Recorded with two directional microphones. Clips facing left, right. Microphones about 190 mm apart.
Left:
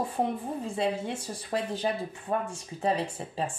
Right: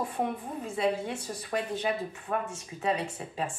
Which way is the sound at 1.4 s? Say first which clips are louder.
Left 2 dB; 30° left (ahead or behind).